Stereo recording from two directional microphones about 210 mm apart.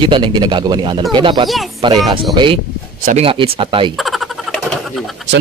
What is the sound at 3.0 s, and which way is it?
Speech, 30° right (ahead or behind).